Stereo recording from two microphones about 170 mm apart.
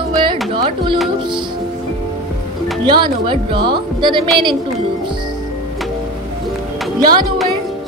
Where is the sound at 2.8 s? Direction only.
25° right (ahead or behind).